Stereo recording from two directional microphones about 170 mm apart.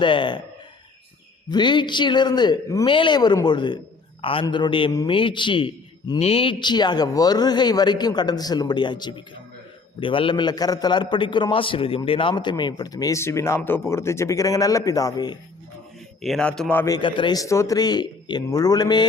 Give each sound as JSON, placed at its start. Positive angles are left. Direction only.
{"t": 0.0, "sound": "a man's voice", "side_deg": 30}
{"t": 1.5, "sound": "a man's voice", "side_deg": 25}
{"t": 16.2, "sound": "a man's voice", "side_deg": 5}
{"t": 16.8, "sound": "a man's voice", "side_deg": 25}